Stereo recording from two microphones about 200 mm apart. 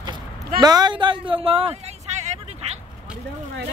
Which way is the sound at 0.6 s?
20° right (ahead or behind).